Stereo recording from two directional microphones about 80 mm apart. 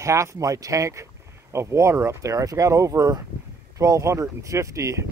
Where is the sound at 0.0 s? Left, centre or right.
Right.